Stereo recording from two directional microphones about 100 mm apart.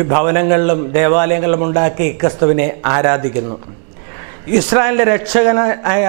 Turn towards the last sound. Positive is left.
turn(degrees=-15)  # may be behind; listen again after turning